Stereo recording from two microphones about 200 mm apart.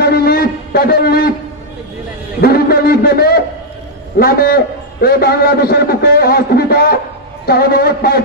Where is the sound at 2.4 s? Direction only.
50° left (ahead or behind).